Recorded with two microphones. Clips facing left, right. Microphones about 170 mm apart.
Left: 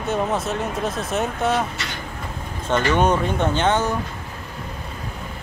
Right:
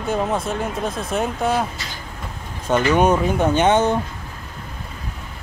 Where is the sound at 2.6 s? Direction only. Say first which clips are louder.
Right 2 dB; 10° right (ahead or behind).